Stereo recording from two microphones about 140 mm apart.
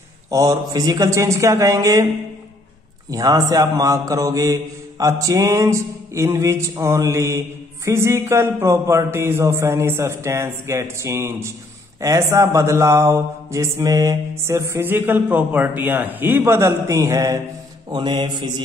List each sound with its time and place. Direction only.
0.3 s a man's voice: 25° right (ahead or behind)
3.1 s a man's voice: 25° right (ahead or behind)
17.9 s mantra: 35° right (ahead or behind)